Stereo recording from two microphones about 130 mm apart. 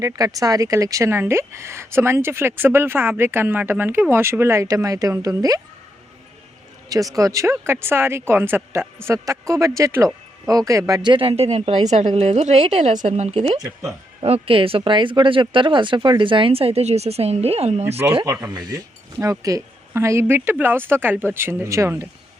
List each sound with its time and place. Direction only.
0.0 s speech: 25° right (ahead or behind)
6.9 s speech: 25° right (ahead or behind)
11.1 s speech: 45° right (ahead or behind)
19.2 s speech: 25° right (ahead or behind)